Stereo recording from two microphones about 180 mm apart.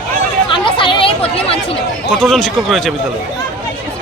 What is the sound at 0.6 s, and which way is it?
Chatter, 30° left (ahead or behind).